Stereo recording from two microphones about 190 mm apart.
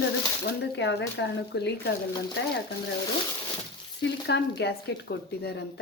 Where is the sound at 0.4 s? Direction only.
65° left (ahead or behind).